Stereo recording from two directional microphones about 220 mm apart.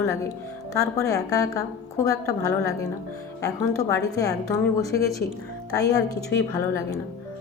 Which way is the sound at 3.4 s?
15° left (ahead or behind).